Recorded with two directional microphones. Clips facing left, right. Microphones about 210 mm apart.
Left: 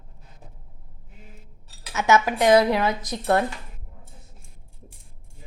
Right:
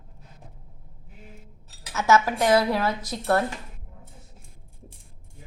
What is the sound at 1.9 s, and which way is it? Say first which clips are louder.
A woman's voice: left 1 dB; 15° left (ahead or behind).